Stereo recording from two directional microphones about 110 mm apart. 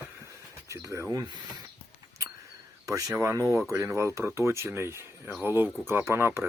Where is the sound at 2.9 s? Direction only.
30° right (ahead or behind).